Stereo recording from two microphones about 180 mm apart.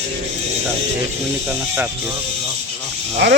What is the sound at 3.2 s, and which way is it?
Speech, 75° right (ahead or behind).